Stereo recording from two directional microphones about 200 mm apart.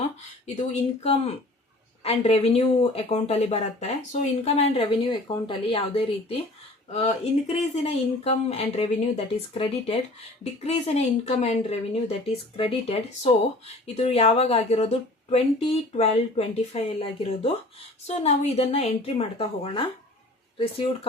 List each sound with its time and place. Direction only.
0.4 s speech: 35° left (ahead or behind)